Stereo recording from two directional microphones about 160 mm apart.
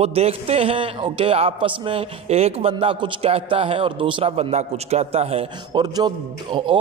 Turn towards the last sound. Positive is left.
turn(degrees=-30)  # may be behind; listen again after turning